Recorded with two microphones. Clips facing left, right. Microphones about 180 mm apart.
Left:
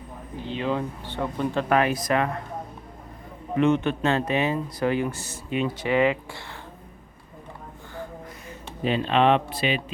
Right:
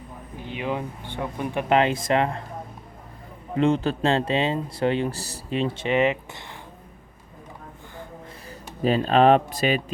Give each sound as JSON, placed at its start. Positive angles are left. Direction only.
{"t": 0.4, "sound": "speech", "side_deg": -10}
{"t": 3.6, "sound": "speech", "side_deg": -30}
{"t": 8.4, "sound": "speech", "side_deg": -40}